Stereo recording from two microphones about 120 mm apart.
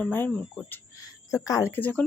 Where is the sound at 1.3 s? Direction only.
30° left (ahead or behind).